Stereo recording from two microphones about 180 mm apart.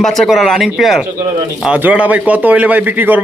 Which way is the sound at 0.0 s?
Centre (ahead or behind).